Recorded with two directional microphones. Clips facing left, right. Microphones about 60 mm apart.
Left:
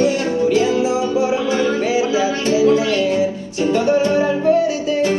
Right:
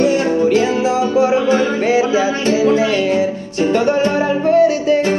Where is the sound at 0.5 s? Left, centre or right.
Right.